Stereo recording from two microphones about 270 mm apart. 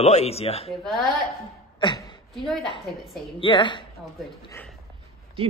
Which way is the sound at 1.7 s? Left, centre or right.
Centre.